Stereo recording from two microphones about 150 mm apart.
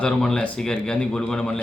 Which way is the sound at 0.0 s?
5° left (ahead or behind).